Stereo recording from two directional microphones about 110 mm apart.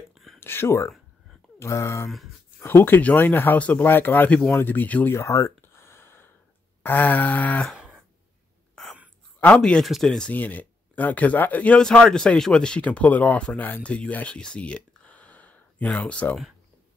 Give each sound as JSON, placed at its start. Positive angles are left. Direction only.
{"t": 0.1, "sound": "whispering", "side_deg": 0}
{"t": 0.4, "sound": "speech", "side_deg": 20}
{"t": 7.7, "sound": "a sound", "side_deg": -5}
{"t": 9.6, "sound": "speech", "side_deg": 5}